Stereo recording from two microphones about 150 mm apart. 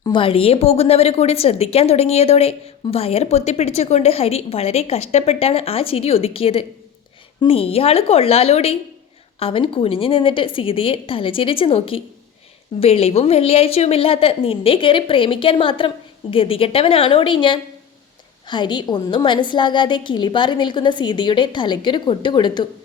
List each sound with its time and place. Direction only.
0.0 s a woman's voice: 35° left (ahead or behind)